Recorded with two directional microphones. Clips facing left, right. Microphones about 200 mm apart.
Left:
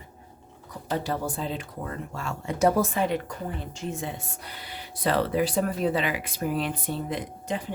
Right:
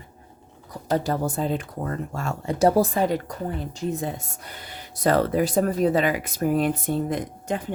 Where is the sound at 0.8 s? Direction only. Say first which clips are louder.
Right 5 dB; 40° right (ahead or behind).